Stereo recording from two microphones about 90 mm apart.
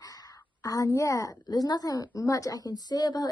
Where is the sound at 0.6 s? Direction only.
40° left (ahead or behind).